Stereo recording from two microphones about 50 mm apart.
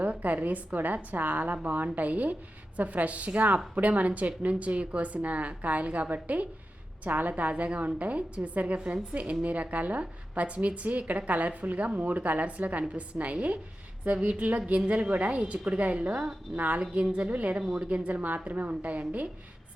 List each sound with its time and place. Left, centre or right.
0.0 s a woman's voice: right